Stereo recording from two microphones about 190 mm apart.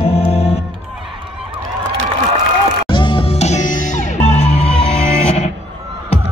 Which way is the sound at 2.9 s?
25° left (ahead or behind).